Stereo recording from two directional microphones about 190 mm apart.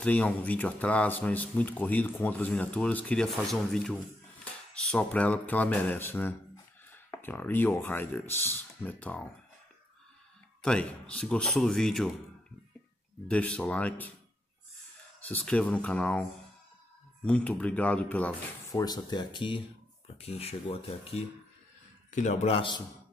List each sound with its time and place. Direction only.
0.0 s speech: 10° left (ahead or behind)
10.6 s speech: 5° left (ahead or behind)
13.3 s speech: 5° left (ahead or behind)
15.2 s speech: 10° left (ahead or behind)
18.8 s speech: 20° left (ahead or behind)